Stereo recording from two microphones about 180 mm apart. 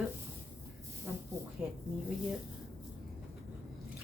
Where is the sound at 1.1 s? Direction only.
15° right (ahead or behind).